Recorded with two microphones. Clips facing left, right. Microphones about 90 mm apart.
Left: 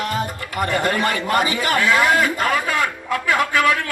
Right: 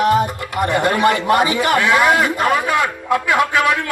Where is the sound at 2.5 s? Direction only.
45° right (ahead or behind).